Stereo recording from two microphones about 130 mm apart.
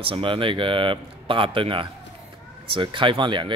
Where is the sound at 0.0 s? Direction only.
40° right (ahead or behind).